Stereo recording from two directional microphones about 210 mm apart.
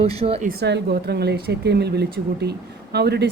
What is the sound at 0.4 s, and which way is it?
Speech, 50° right (ahead or behind).